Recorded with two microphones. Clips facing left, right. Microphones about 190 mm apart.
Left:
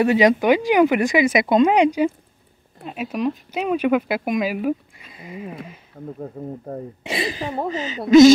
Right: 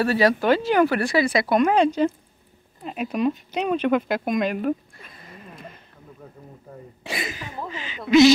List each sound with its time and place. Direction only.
0.0 s speech: 20° left (ahead or behind)
2.8 s speech: 5° left (ahead or behind)
5.4 s speech: 65° left (ahead or behind)
6.0 s speech: 50° left (ahead or behind)
7.0 s a woman's voice: 25° left (ahead or behind)